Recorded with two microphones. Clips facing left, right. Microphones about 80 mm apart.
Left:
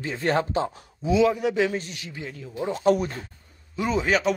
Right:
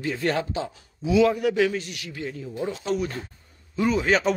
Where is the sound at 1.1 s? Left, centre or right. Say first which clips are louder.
Right 1 dB; centre.